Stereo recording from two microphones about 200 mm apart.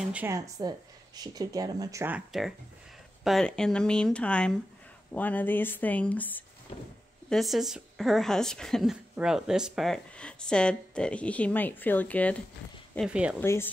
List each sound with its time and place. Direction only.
0.0 s speech: 10° right (ahead or behind)
13.4 s speech: 10° left (ahead or behind)